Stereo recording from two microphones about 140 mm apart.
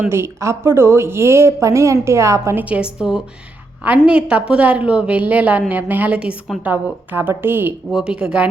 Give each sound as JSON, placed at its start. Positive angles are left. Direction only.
{"t": 0.1, "sound": "a woman's voice", "side_deg": -20}
{"t": 7.9, "sound": "a woman's voice", "side_deg": -5}